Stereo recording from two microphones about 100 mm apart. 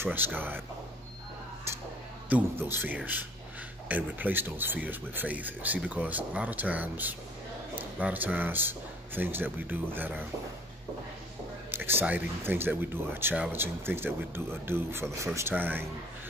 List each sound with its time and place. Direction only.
0.0 s speech: 20° right (ahead or behind)
2.2 s speech: 20° right (ahead or behind)
11.7 s speech: 20° right (ahead or behind)